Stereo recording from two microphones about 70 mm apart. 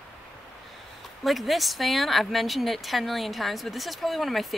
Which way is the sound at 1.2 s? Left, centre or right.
Centre.